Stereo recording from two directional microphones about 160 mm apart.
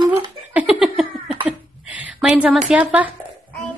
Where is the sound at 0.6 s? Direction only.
5° right (ahead or behind).